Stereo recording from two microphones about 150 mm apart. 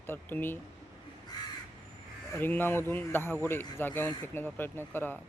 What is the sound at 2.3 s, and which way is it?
A man's voice, 15° left (ahead or behind).